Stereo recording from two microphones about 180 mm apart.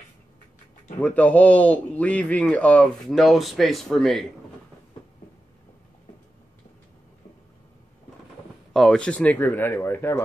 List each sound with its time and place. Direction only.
1.0 s a man's voice: 10° left (ahead or behind)
8.7 s a man's voice: 5° left (ahead or behind)